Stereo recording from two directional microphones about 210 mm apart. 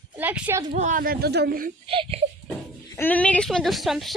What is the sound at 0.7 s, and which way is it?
Speech, 35° right (ahead or behind).